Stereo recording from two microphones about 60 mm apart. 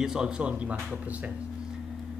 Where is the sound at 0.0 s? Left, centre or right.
Centre.